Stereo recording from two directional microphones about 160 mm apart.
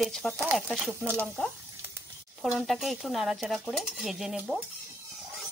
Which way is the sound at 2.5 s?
Centre (ahead or behind).